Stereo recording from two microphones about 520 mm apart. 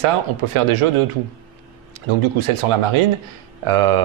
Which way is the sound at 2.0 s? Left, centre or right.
Right.